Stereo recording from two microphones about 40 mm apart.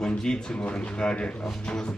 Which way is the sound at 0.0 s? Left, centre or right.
Centre.